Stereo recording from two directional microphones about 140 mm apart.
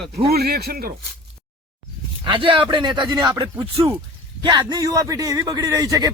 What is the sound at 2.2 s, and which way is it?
A man's voice, 35° right (ahead or behind).